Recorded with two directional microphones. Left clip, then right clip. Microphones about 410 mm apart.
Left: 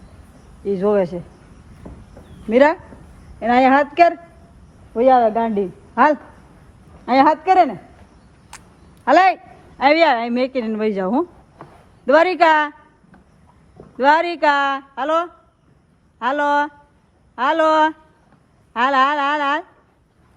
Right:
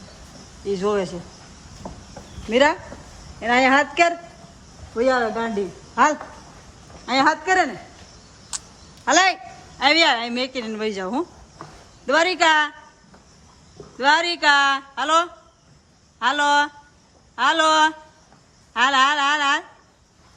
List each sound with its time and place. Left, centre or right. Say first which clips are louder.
0.6 s a woman's voice: left 5 dB; centre
2.5 s a woman's voice: left 4 dB; centre
5.9 s a woman's voice: left 3 dB; centre
8.5 s a sound: right 7 dB; centre
9.0 s a woman's voice: left 4 dB; centre
14.0 s a woman's voice: left 3 dB; centre